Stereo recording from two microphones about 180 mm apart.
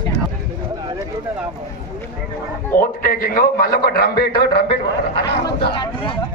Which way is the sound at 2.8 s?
55° left (ahead or behind).